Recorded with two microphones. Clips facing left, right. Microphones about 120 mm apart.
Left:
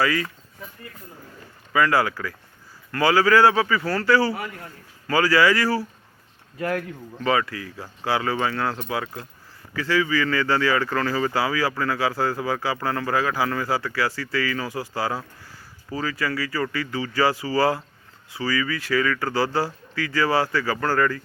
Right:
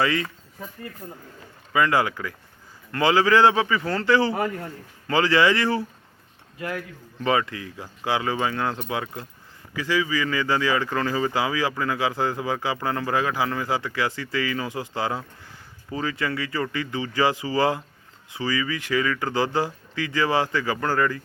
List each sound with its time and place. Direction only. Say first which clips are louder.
0.0 s speech: left 1 dB; 25° right (ahead or behind)
1.7 s speech: left 1 dB; 20° right (ahead or behind)
4.4 s a man's voice: right 7 dB; 45° right (ahead or behind)
5.0 s speech: left 1 dB; 25° right (ahead or behind)
7.3 s speech: even; 25° right (ahead or behind)